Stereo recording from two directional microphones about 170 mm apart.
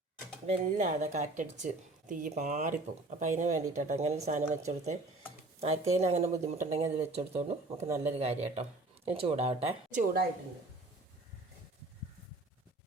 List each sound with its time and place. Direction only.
0.4 s speech: 45° right (ahead or behind)